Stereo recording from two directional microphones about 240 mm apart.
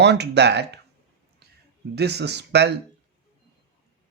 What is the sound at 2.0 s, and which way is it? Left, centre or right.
Speech, right.